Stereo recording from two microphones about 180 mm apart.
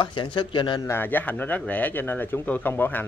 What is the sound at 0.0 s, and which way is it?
Speech, 25° left (ahead or behind).